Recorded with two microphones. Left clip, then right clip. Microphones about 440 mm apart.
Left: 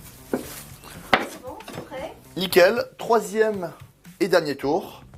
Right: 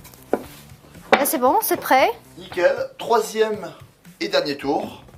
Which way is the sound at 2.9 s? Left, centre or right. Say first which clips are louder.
Right 1 dB; left.